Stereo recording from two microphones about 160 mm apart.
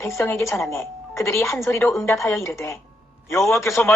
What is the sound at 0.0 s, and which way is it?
A man's voice, 15° left (ahead or behind).